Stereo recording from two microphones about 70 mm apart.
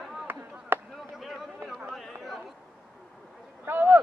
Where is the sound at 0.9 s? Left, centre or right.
Centre.